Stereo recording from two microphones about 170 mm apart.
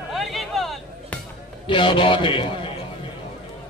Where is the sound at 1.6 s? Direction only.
30° left (ahead or behind).